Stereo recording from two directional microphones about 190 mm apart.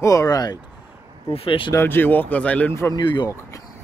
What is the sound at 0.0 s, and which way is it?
Speech, 15° left (ahead or behind).